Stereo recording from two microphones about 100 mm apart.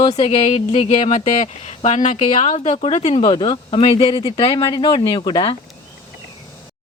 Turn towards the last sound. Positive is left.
turn(degrees=50)  # may be behind; listen again after turning